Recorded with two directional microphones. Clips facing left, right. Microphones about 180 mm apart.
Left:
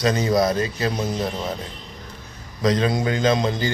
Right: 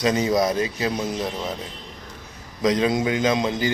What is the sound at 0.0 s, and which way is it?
A man's voice, 15° right (ahead or behind).